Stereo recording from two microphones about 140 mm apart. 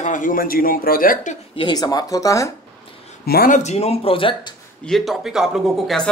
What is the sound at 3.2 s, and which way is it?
Speech, 90° left.